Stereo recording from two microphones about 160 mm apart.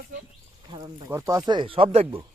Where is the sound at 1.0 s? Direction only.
20° right (ahead or behind); by 2.2 s 35° right (ahead or behind).